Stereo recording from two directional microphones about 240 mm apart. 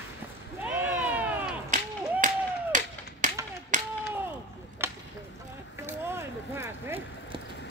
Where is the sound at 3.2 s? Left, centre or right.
Right.